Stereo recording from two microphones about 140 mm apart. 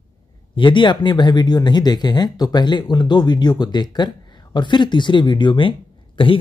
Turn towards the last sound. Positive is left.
turn(degrees=40)  # may be behind; listen again after turning